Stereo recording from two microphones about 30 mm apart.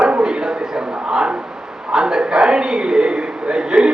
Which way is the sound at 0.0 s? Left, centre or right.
Right.